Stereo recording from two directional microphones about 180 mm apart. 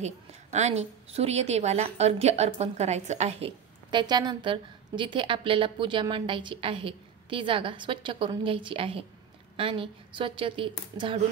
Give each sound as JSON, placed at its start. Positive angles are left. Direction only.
{"t": 0.0, "sound": "a woman's voice", "side_deg": -40}